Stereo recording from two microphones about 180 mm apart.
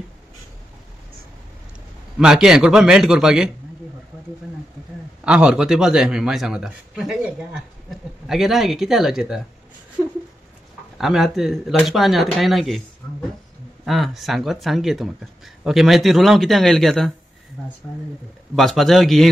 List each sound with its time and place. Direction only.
2.1 s a man's voice: 5° right (ahead or behind)
5.2 s a man's voice: 5° right (ahead or behind)
11.0 s a man's voice: centre (ahead or behind)
13.8 s a man's voice: centre (ahead or behind)
18.5 s a man's voice: centre (ahead or behind)